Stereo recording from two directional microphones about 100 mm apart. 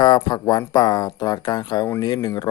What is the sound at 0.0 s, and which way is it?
Speech, 45° left (ahead or behind).